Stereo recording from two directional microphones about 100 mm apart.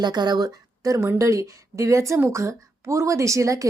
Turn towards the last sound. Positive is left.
turn(degrees=-30)  # may be behind; listen again after turning